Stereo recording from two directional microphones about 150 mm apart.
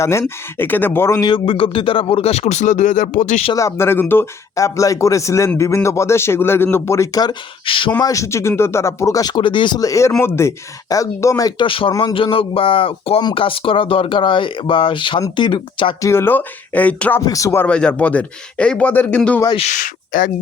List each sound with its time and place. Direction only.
0.0 s speech: 15° left (ahead or behind)
1.3 s speech: 35° left (ahead or behind); by 3.4 s 55° left (ahead or behind)
3.5 s speech: 20° left (ahead or behind)
7.9 s speech: 20° left (ahead or behind)
16.0 s speech: 20° left (ahead or behind)
19.5 s speech: 55° left (ahead or behind)